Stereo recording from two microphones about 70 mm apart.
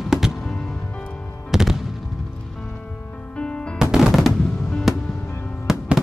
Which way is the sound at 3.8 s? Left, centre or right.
Centre.